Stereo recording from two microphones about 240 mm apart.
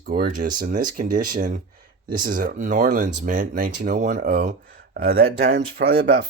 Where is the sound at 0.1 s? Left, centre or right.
Right.